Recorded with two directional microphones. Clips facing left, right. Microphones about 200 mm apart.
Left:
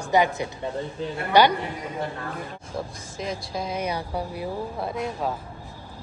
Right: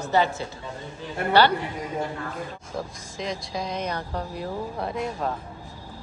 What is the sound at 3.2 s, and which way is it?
A woman's voice, 5° left (ahead or behind).